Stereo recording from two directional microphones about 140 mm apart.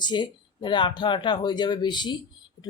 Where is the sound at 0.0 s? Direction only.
35° left (ahead or behind).